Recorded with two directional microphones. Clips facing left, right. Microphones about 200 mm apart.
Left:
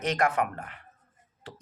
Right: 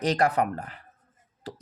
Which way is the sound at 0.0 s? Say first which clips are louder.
Right 3 dB; 35° right (ahead or behind).